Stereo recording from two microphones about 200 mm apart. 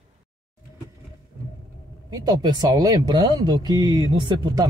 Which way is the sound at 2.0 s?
20° right (ahead or behind).